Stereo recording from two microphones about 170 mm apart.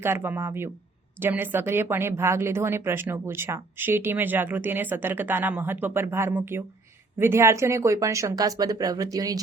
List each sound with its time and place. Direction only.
0.0 s a woman's voice: 10° right (ahead or behind)